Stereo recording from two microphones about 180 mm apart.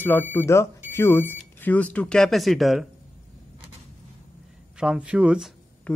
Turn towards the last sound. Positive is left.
turn(degrees=-5)  # may be behind; listen again after turning